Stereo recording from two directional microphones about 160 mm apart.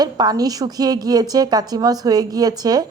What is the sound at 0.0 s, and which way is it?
Speech, 25° right (ahead or behind).